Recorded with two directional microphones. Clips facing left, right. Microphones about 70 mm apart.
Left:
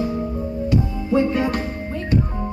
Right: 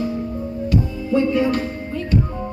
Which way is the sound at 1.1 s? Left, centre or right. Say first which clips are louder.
Right 1 dB; left.